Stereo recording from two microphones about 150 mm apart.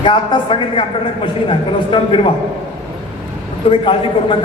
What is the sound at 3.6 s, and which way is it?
Speech, 35° left (ahead or behind).